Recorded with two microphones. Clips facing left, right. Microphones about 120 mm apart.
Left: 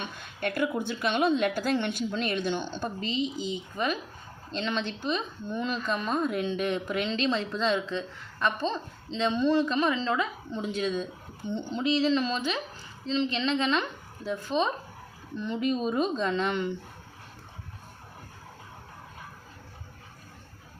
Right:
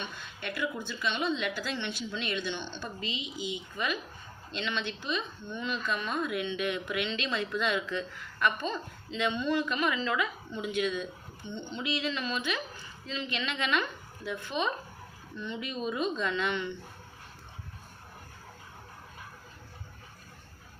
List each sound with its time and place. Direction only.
0.0 s a woman's voice: 50° left (ahead or behind)